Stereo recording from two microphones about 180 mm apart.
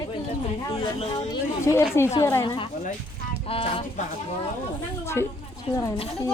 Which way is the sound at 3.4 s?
30° left (ahead or behind).